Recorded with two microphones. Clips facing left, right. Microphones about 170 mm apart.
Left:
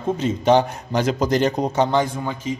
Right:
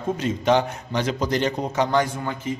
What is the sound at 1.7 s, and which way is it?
Speech, 25° left (ahead or behind).